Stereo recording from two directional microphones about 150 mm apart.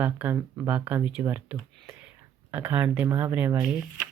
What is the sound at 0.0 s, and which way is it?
Speech, 15° right (ahead or behind).